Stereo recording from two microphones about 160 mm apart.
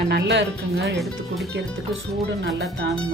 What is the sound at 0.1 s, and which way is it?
Speech, 90° right.